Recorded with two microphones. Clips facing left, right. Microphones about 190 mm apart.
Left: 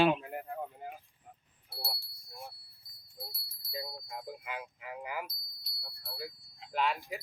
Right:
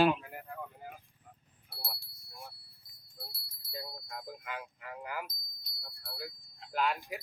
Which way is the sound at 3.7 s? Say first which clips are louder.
Left 2 dB; 10° left (ahead or behind).